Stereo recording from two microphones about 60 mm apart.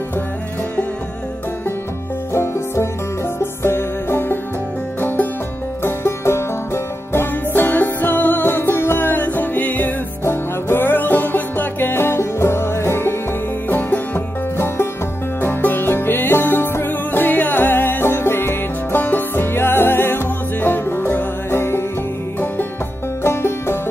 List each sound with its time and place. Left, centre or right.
2.3 s music: left
5.9 s music: left
13.7 s music: left
23.2 s music: left